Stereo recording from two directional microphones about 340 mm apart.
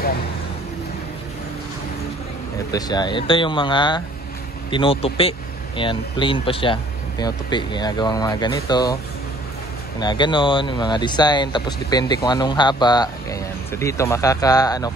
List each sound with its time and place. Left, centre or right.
2.7 s speech: centre
9.9 s speech: centre